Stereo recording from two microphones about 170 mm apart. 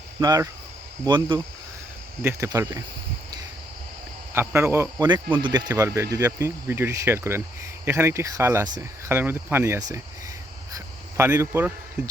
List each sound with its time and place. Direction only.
0.2 s speech: 20° right (ahead or behind)
4.4 s speech: 15° right (ahead or behind)
5.3 s speech: 25° right (ahead or behind)
10.7 s a sound: 20° right (ahead or behind)